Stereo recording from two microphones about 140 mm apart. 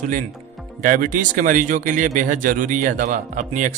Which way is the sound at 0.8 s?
75° right (ahead or behind).